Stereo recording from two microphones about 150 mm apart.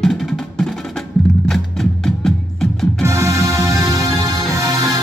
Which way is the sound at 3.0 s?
20° right (ahead or behind).